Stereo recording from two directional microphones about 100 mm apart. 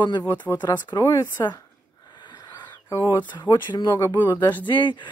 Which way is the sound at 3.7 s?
50° left (ahead or behind).